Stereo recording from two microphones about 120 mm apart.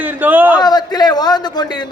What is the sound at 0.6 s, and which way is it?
A man's voice, 35° left (ahead or behind).